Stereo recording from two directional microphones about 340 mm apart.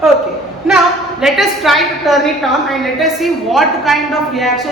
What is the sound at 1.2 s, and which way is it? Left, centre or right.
A woman's voice, centre.